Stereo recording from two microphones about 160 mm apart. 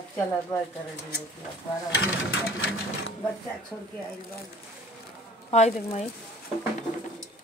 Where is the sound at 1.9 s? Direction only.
90° left.